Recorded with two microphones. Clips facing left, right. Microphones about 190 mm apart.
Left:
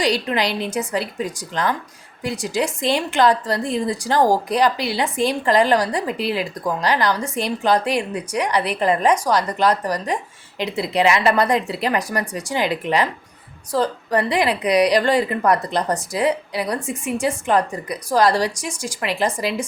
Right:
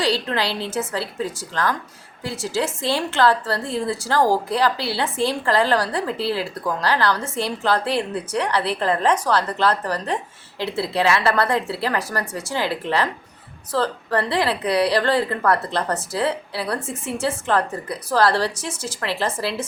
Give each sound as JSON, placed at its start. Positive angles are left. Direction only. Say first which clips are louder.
{"t": 0.0, "sound": "a woman's voice", "louder": "left 2 dB", "side_deg": 15}